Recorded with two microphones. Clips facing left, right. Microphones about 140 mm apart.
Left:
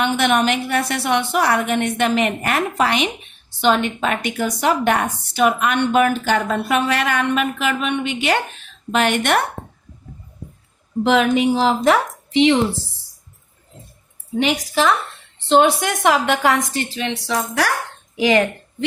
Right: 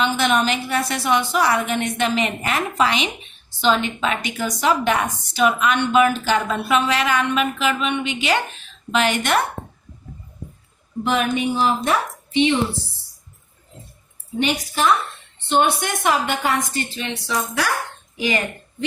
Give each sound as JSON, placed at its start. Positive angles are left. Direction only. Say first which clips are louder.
{"t": 0.0, "sound": "a woman's voice", "louder": "left 2 dB", "side_deg": 60}
{"t": 11.0, "sound": "a woman's voice", "louder": "left 5 dB", "side_deg": 90}
{"t": 14.3, "sound": "a woman's voice", "louder": "left 3 dB", "side_deg": 90}
{"t": 18.2, "sound": "a woman's voice", "louder": "left 7 dB", "side_deg": 90}